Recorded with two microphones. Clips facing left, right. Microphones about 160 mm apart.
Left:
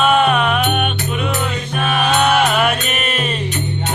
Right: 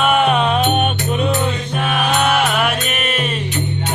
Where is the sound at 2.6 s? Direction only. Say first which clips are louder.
Left 1 dB; 5° right (ahead or behind).